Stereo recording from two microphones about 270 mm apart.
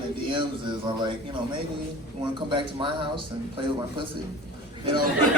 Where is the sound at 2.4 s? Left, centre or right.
Centre.